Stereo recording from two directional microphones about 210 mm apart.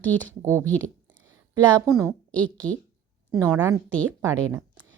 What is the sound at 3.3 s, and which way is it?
Speech, 15° right (ahead or behind).